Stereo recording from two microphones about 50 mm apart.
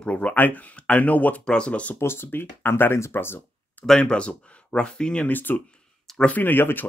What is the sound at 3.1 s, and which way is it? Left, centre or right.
Speech, left.